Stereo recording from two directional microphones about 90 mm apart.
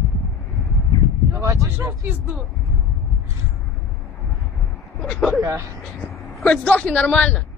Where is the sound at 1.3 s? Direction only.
35° right (ahead or behind).